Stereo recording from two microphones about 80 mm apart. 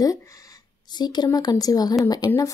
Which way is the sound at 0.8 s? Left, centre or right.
Left.